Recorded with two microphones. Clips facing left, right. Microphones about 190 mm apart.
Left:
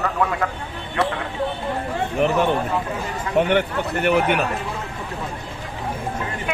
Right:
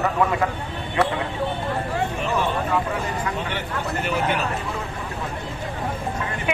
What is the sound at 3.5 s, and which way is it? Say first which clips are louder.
Speech: left 7 dB; 60° left (ahead or behind).